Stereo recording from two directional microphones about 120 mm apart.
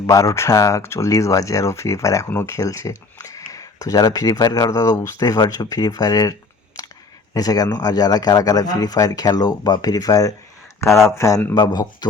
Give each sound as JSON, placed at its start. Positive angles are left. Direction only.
{"t": 0.1, "sound": "speech", "side_deg": 25}
{"t": 7.3, "sound": "speech", "side_deg": 35}
{"t": 11.5, "sound": "speech", "side_deg": 35}